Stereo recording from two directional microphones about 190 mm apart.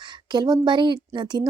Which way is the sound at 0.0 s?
20° right (ahead or behind).